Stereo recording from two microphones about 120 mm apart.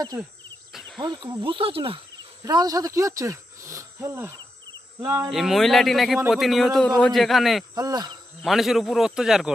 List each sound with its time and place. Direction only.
0.7 s cricket: centre (ahead or behind)
0.9 s speech: 40° right (ahead or behind)
2.4 s speech: 30° right (ahead or behind)
5.3 s speech: centre (ahead or behind)
7.8 s insect: 35° right (ahead or behind)
8.4 s speech: centre (ahead or behind)